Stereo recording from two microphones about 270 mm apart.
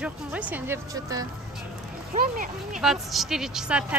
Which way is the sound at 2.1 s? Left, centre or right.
Right.